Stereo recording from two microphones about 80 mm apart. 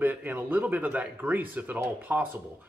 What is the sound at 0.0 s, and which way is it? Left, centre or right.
Speech, right.